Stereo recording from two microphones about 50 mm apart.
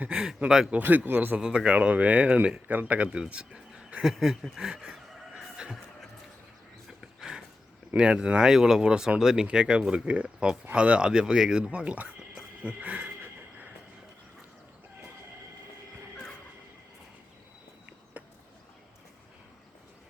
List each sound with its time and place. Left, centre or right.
0.1 s speech: centre
0.8 s speech: right
1.4 s speech: centre
4.0 s speech: centre
4.6 s speech: centre
7.9 s speech: centre
18.2 s a sound: right